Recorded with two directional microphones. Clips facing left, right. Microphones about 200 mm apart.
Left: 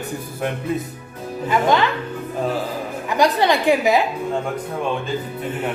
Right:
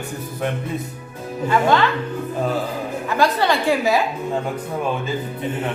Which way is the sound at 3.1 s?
15° left (ahead or behind).